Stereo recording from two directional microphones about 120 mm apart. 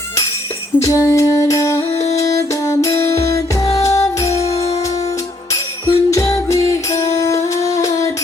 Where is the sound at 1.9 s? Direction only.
65° left (ahead or behind).